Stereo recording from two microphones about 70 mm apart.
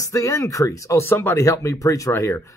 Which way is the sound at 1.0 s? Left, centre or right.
Left.